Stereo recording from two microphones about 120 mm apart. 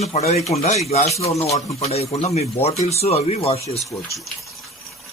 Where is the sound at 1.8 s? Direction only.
60° left (ahead or behind).